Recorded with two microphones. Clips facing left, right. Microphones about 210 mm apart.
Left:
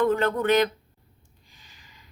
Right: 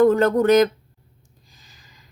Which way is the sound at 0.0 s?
40° right (ahead or behind).